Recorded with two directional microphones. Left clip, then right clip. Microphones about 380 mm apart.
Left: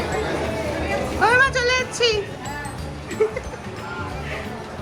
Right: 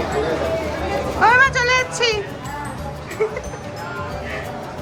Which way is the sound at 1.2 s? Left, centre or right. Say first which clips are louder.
Right 3 dB; centre.